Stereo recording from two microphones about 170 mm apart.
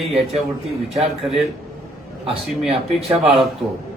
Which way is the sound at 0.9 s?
Centre (ahead or behind).